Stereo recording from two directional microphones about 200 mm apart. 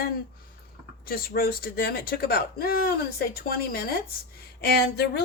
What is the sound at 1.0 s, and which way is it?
Speech, 50° left (ahead or behind).